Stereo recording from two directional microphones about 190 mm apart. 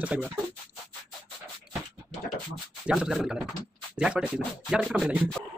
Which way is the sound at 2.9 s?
Centre (ahead or behind).